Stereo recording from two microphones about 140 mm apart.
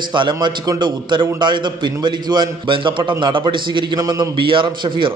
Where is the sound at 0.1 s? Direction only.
35° right (ahead or behind).